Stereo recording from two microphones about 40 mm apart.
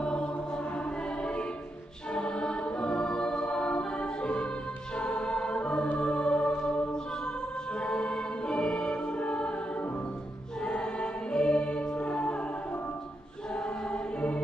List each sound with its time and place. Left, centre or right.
0.0 s music: left
2.1 s music: left
10.6 s choir: left
13.6 s choir: left